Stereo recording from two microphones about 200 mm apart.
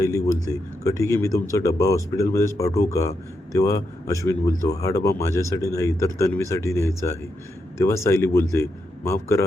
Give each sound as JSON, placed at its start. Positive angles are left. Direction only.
{"t": 0.0, "sound": "speech", "side_deg": 15}